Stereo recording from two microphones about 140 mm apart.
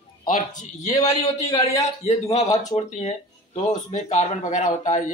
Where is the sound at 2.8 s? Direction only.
55° left (ahead or behind).